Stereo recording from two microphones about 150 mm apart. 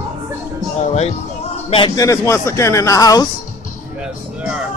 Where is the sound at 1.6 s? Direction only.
35° left (ahead or behind).